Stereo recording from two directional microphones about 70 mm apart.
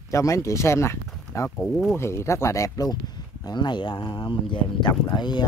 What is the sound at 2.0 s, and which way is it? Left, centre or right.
Speech, left.